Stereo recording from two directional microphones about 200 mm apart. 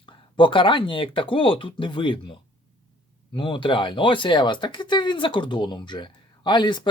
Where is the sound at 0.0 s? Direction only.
25° left (ahead or behind).